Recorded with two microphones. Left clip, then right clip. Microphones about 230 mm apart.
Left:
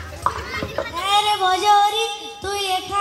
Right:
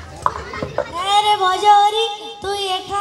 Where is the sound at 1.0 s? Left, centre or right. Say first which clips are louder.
Right 3 dB; right.